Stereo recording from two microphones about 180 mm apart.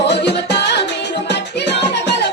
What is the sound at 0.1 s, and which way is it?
Music, 70° left (ahead or behind).